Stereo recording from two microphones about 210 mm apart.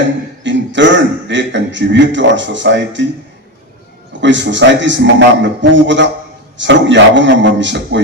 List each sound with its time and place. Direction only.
0.4 s a man's voice: 60° right (ahead or behind)
4.2 s a man's voice: 60° right (ahead or behind)